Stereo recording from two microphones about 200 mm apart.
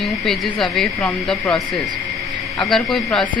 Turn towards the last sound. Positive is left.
turn(degrees=0)  # may be behind; listen again after turning